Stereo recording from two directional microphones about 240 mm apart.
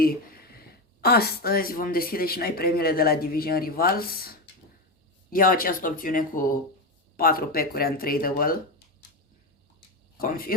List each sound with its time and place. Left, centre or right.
0.0 s a sound: left
1.0 s speech: left
10.2 s speech: left